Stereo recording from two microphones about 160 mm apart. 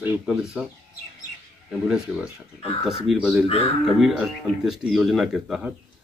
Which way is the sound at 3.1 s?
5° right (ahead or behind).